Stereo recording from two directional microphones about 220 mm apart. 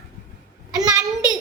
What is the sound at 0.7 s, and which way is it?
Speech, 15° right (ahead or behind).